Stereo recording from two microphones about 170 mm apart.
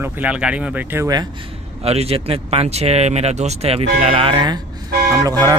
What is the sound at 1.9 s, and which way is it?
Speech, 35° right (ahead or behind).